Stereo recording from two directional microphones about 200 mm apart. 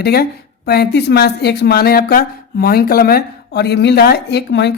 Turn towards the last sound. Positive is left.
turn(degrees=55)  # may be behind; listen again after turning